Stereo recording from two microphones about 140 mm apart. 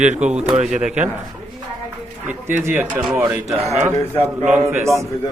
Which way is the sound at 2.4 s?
15° right (ahead or behind).